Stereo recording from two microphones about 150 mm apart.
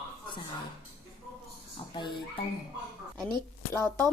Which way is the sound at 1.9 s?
30° left (ahead or behind).